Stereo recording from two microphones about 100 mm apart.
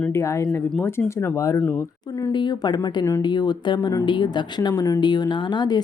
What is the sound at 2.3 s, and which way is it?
Speech, 45° left (ahead or behind).